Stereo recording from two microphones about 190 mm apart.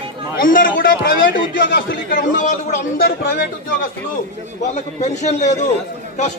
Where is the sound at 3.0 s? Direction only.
55° left (ahead or behind).